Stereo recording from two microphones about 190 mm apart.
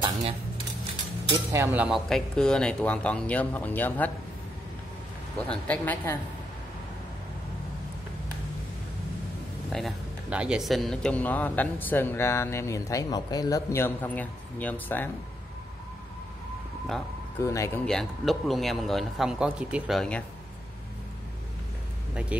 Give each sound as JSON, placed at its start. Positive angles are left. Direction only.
{"t": 1.5, "sound": "speech", "side_deg": -10}
{"t": 5.5, "sound": "speech", "side_deg": 10}
{"t": 9.7, "sound": "speech", "side_deg": 0}
{"t": 17.4, "sound": "speech", "side_deg": 15}
{"t": 17.8, "sound": "speech", "side_deg": 0}
{"t": 22.3, "sound": "speech", "side_deg": -5}